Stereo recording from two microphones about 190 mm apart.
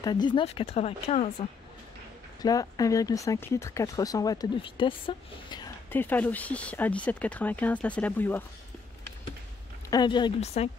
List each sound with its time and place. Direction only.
0.0 s speech: 20° left (ahead or behind)
2.4 s speech: 20° left (ahead or behind)
5.9 s speech: 10° left (ahead or behind)
9.8 s speech: 20° left (ahead or behind)